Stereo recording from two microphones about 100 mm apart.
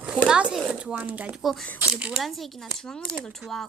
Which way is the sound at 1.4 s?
Centre (ahead or behind).